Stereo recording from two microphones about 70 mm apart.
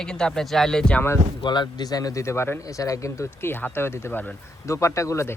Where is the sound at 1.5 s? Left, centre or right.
Left.